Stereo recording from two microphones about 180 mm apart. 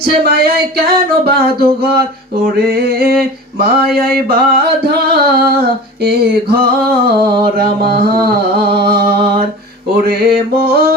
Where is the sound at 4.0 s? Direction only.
60° right (ahead or behind).